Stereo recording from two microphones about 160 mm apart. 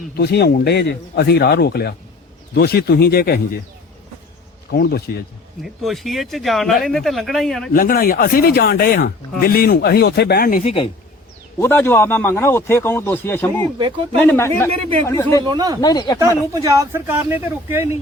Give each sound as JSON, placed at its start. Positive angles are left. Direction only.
{"t": 0.2, "sound": "speech", "side_deg": 90}
{"t": 4.7, "sound": "speech", "side_deg": 80}
{"t": 5.6, "sound": "speech", "side_deg": 0}
{"t": 7.7, "sound": "speech", "side_deg": 60}
{"t": 10.6, "sound": "speech", "side_deg": 40}
{"t": 11.6, "sound": "speech", "side_deg": 15}
{"t": 13.7, "sound": "speech", "side_deg": -30}
{"t": 14.2, "sound": "speech", "side_deg": 10}
{"t": 15.4, "sound": "speech", "side_deg": -25}
{"t": 15.8, "sound": "speech", "side_deg": 25}
{"t": 16.5, "sound": "speech", "side_deg": -20}